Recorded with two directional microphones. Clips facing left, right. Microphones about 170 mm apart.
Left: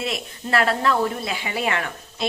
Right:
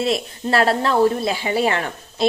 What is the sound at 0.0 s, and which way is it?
Speech, 35° right (ahead or behind).